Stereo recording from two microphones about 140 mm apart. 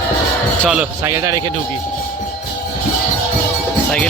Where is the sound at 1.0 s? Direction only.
25° right (ahead or behind).